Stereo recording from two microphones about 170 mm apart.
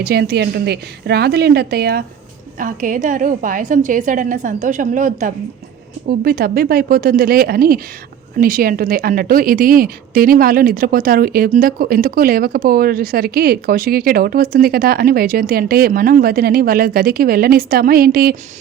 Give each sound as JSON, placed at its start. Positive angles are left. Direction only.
{"t": 0.0, "sound": "a woman's voice", "side_deg": -70}
{"t": 2.6, "sound": "a woman's voice", "side_deg": -50}
{"t": 6.1, "sound": "a woman's voice", "side_deg": -60}